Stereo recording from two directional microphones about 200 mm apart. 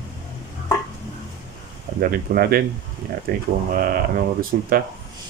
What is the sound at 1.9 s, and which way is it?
Speech, 45° right (ahead or behind).